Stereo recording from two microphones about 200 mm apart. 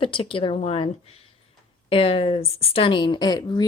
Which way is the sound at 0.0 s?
25° left (ahead or behind).